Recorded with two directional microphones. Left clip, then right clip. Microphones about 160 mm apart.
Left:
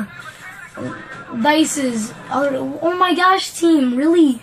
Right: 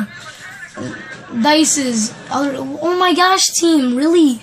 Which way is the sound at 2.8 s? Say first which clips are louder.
Right 2 dB; 45° right (ahead or behind).